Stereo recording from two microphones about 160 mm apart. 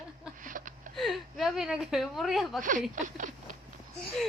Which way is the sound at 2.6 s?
55° right (ahead or behind).